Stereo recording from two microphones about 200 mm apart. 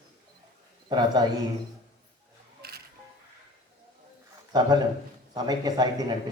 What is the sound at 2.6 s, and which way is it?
Music, 50° right (ahead or behind).